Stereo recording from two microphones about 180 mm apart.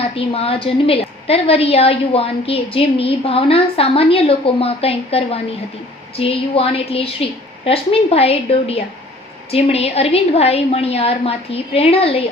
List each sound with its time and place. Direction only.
0.2 s a woman's voice: 30° left (ahead or behind)